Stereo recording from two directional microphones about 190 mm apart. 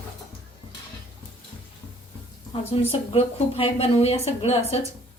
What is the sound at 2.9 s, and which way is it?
A woman's voice, 30° left (ahead or behind).